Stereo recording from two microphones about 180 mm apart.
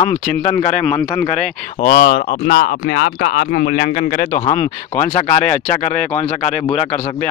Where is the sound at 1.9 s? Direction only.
75° left (ahead or behind).